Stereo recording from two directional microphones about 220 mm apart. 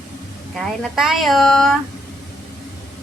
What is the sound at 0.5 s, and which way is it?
Speech, centre (ahead or behind).